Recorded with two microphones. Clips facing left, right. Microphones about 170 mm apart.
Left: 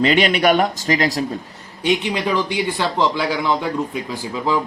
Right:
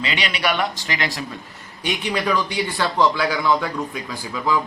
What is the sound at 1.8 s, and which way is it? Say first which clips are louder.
A man's voice: left 4 dB; 25° left (ahead or behind).